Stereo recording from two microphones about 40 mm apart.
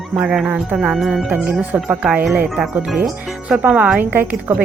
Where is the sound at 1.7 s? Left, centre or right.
Right.